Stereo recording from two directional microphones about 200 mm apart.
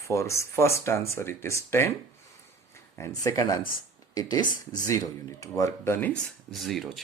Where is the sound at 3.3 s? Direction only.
15° left (ahead or behind).